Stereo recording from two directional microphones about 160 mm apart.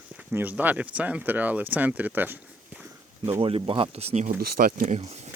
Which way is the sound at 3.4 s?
35° right (ahead or behind).